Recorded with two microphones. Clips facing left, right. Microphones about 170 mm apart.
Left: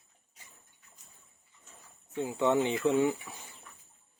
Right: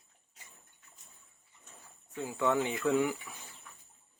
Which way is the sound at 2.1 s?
20° left (ahead or behind).